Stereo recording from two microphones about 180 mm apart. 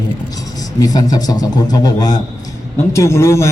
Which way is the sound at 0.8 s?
20° left (ahead or behind).